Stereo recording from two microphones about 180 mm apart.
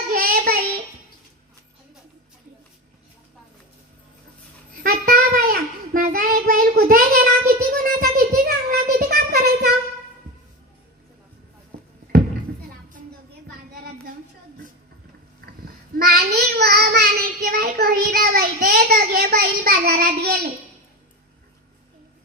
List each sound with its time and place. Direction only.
0.1 s child singing: 55° right (ahead or behind)
4.8 s child singing: 55° right (ahead or behind)
15.4 s child singing: 55° right (ahead or behind)